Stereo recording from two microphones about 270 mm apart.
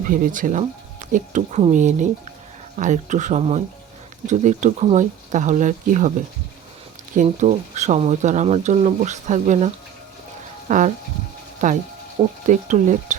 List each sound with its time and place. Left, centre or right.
0.1 s speech: right
7.2 s speech: right